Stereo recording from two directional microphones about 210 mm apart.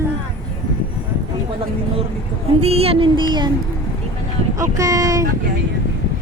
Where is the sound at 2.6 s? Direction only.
30° right (ahead or behind).